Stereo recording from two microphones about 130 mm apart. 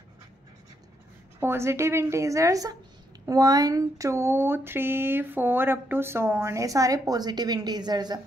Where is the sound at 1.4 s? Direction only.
20° right (ahead or behind).